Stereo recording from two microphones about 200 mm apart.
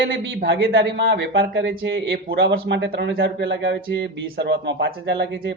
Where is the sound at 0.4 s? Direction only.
65° right (ahead or behind).